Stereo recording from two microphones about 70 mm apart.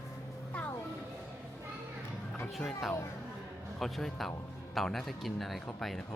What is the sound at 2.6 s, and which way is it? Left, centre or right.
Speech, centre.